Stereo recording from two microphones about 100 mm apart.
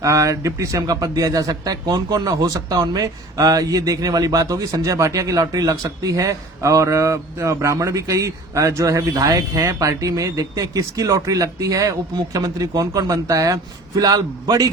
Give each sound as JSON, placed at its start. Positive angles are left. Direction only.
{"t": 0.0, "sound": "a man's voice", "side_deg": -35}